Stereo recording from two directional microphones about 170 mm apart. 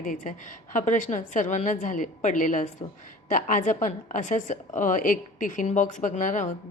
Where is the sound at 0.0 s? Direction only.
50° left (ahead or behind).